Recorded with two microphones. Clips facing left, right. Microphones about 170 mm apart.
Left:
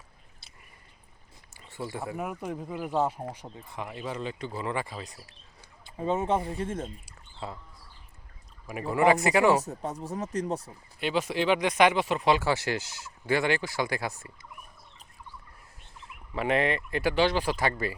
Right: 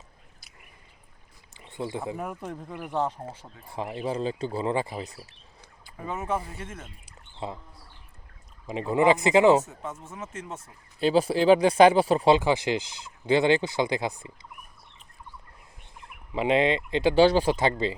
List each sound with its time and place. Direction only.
1.5 s a sound: 20° right (ahead or behind)
2.1 s speech: 5° left (ahead or behind)
3.7 s speech: 30° right (ahead or behind)
5.8 s speech: 25° left (ahead or behind)
7.0 s bird: 20° right (ahead or behind)
8.6 s speech: 20° right (ahead or behind)
9.6 s speech: 35° left (ahead or behind)
11.0 s speech: 35° right (ahead or behind)
12.4 s speech: 15° right (ahead or behind)
16.3 s speech: 20° right (ahead or behind)